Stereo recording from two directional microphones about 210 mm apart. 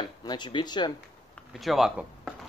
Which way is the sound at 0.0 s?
20° left (ahead or behind).